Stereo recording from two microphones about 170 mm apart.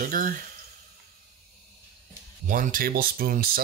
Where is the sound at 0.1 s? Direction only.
55° right (ahead or behind).